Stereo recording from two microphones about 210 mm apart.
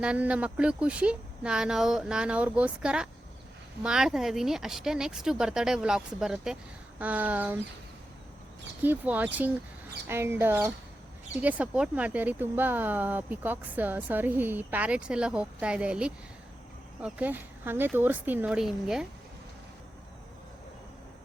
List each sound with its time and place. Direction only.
0.0 s speech: 5° right (ahead or behind)
8.8 s speech: 10° right (ahead or behind)